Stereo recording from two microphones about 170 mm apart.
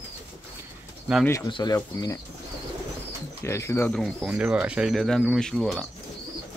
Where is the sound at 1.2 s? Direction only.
15° left (ahead or behind).